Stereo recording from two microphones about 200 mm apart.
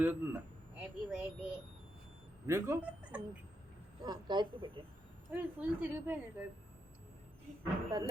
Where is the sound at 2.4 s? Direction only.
15° right (ahead or behind).